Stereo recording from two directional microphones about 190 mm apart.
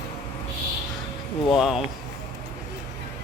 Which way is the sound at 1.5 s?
Centre (ahead or behind).